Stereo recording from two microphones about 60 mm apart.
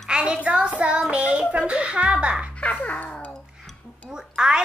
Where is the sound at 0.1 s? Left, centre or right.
Centre.